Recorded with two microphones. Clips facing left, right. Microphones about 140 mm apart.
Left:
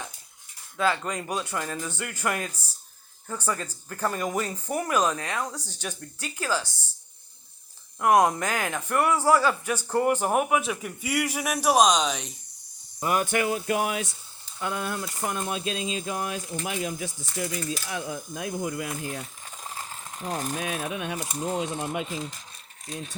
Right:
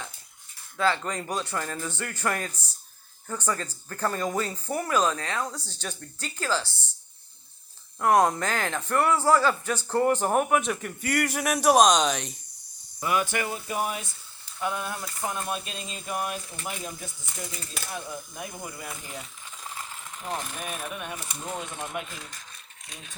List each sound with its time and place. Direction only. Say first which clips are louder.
0.8 s speech: even; 15° left (ahead or behind)
7.9 s speech: left 1 dB; 15° left (ahead or behind)
13.0 s speech: left 2 dB; 45° left (ahead or behind)
13.5 s speech: left 4 dB; 90° left
14.6 s speech: left 1 dB; 75° left (ahead or behind)
19.2 s a sound: left 2 dB; 35° left (ahead or behind)
20.6 s speech: left 4 dB; 90° left
21.2 s speech: left 6 dB; 40° left (ahead or behind)